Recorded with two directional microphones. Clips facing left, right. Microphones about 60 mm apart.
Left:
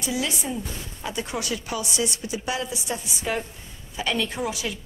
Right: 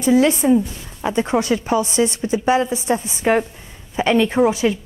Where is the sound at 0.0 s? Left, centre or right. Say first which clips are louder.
Right 14 dB; right.